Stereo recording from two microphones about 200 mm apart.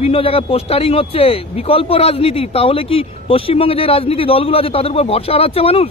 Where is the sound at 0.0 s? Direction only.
30° left (ahead or behind).